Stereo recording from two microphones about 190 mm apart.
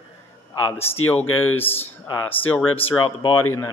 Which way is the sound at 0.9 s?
90° left.